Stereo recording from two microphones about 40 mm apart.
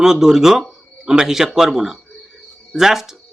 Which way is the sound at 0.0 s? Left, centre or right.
Centre.